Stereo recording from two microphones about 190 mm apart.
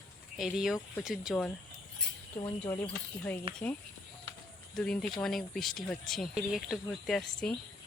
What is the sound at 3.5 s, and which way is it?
Speech, 30° right (ahead or behind).